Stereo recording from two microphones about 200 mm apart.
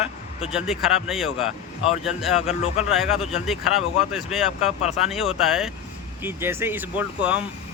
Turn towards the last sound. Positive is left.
turn(degrees=-5)  # may be behind; listen again after turning